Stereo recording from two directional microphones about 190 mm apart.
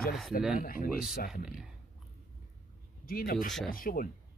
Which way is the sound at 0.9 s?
5° right (ahead or behind).